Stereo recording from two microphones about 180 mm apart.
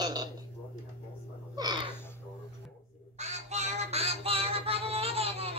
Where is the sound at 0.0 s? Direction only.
20° right (ahead or behind).